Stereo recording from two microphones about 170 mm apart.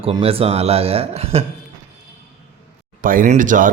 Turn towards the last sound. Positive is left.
turn(degrees=-50)  # may be behind; listen again after turning